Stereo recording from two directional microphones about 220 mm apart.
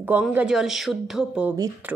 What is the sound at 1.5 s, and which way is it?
Speech, 15° right (ahead or behind).